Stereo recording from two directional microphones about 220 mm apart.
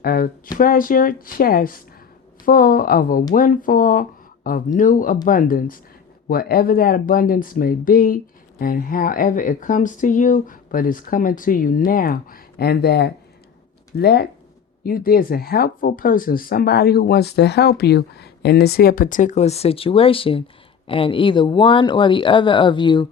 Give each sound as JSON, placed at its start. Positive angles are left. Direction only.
{"t": 0.0, "sound": "speech", "side_deg": 40}